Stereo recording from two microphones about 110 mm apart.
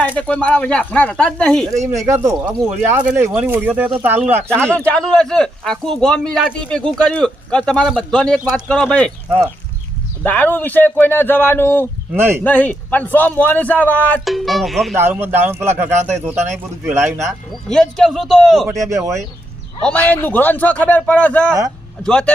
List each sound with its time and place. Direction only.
0.0 s speech: 15° left (ahead or behind)
1.9 s a man's voice: 25° right (ahead or behind)
4.4 s speech: 10° left (ahead or behind)
10.2 s speech: 15° left (ahead or behind)
12.1 s a man's voice: 20° right (ahead or behind)
12.4 s speech: 15° left (ahead or behind)
14.3 s a man's voice: centre (ahead or behind)
14.9 s a man's voice: 20° right (ahead or behind)
17.7 s a man's voice: 5° left (ahead or behind)
18.8 s a man's voice: 30° right (ahead or behind)
19.8 s speech: 15° left (ahead or behind)